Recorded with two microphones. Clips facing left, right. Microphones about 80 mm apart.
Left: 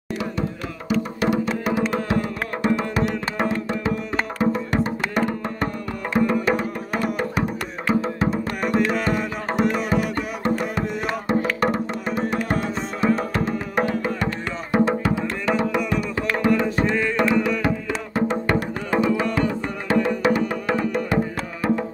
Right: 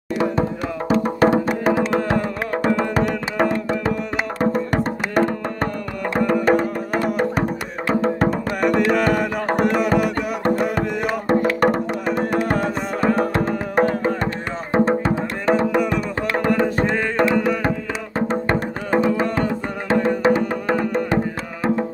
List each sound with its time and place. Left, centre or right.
0.2 s music: right
8.5 s music: right